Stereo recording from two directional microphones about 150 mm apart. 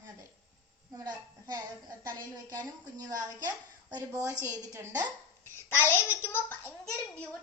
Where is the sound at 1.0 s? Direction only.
25° right (ahead or behind).